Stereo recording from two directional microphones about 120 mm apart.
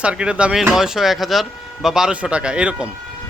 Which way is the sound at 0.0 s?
10° right (ahead or behind).